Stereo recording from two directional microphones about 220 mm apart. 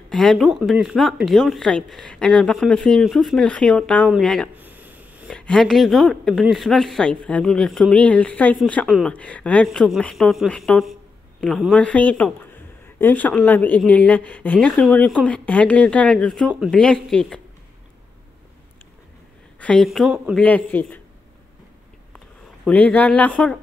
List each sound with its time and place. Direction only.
0.1 s speech: centre (ahead or behind)
4.6 s a sound: 10° right (ahead or behind)
5.3 s speech: 5° left (ahead or behind)
19.6 s speech: 5° left (ahead or behind)
22.7 s speech: 5° left (ahead or behind)